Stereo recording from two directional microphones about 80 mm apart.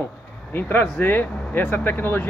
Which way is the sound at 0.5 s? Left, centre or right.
Left.